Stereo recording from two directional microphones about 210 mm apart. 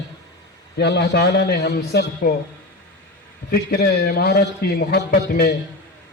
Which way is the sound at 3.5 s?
50° left (ahead or behind).